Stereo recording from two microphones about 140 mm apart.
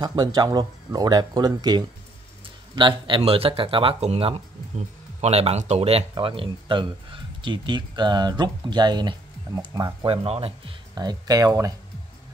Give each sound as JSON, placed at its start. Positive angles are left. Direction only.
{"t": 0.0, "sound": "speech", "side_deg": -30}
{"t": 2.4, "sound": "a sound", "side_deg": -35}
{"t": 3.3, "sound": "speech", "side_deg": -40}
{"t": 10.0, "sound": "speech", "side_deg": -45}
{"t": 11.0, "sound": "speech", "side_deg": -25}